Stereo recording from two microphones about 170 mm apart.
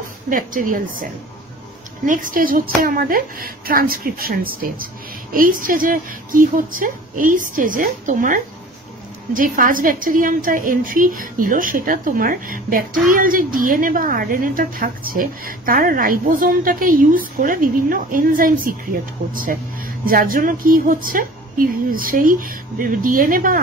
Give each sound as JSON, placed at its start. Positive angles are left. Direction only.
{"t": 0.3, "sound": "a woman's voice", "side_deg": -55}